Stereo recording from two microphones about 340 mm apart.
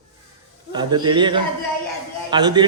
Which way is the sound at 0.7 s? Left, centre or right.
Centre.